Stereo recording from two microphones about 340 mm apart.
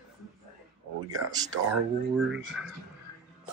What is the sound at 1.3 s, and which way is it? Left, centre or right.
Speech, centre.